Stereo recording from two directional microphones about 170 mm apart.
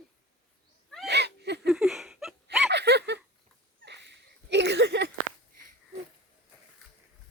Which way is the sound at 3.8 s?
90° right.